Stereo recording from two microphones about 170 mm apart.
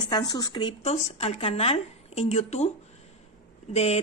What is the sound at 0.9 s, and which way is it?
A woman's voice, 40° left (ahead or behind).